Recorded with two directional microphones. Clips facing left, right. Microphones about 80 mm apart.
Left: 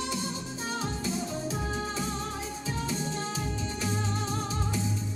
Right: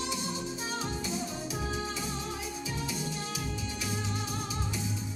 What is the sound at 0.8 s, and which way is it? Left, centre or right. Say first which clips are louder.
Music: left 2 dB; left.